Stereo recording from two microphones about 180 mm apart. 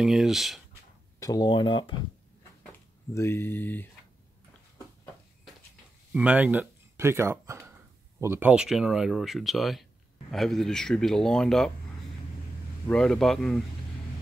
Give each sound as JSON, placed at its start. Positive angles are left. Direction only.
{"t": 0.0, "sound": "speech", "side_deg": 0}
{"t": 1.2, "sound": "speech", "side_deg": 20}
{"t": 3.2, "sound": "speech", "side_deg": 15}
{"t": 6.1, "sound": "speech", "side_deg": -5}
{"t": 12.8, "sound": "speech", "side_deg": 5}